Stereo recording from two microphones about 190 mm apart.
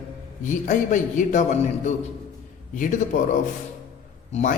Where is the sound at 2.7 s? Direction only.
45° left (ahead or behind).